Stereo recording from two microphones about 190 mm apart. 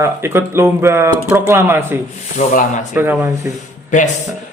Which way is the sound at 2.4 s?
35° left (ahead or behind).